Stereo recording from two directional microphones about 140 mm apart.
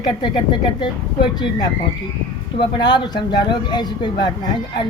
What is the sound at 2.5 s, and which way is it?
Speech, 30° left (ahead or behind).